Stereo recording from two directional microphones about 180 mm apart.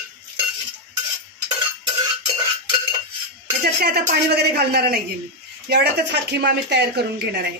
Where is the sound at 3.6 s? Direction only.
60° right (ahead or behind).